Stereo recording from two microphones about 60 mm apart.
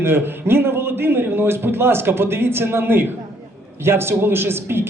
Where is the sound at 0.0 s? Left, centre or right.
Right.